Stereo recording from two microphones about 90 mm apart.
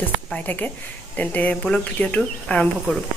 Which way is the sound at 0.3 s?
20° left (ahead or behind).